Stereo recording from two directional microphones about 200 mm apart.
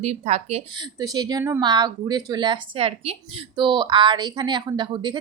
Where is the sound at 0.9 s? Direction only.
20° right (ahead or behind).